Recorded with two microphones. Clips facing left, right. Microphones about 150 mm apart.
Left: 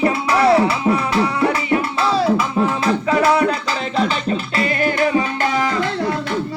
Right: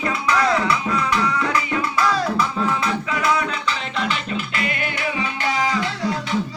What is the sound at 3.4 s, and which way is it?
Music, 40° left (ahead or behind).